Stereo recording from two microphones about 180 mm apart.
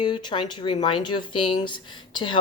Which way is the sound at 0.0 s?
25° left (ahead or behind).